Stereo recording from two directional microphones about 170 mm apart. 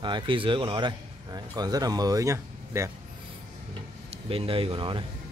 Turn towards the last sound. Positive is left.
turn(degrees=-30)  # may be behind; listen again after turning